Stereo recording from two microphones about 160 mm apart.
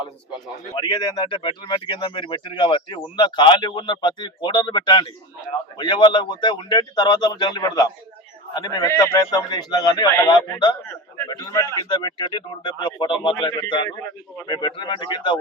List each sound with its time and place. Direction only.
0.7 s speech: 25° left (ahead or behind)